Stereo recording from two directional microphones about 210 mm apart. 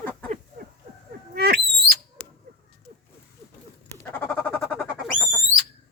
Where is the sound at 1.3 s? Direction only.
50° right (ahead or behind).